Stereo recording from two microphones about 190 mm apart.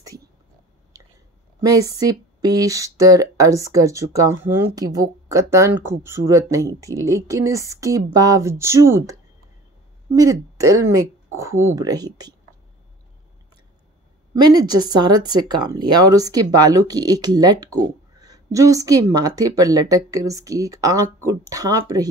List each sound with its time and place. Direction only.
1.6 s speech: 20° right (ahead or behind)
10.1 s speech: 15° right (ahead or behind)
14.3 s speech: 20° right (ahead or behind)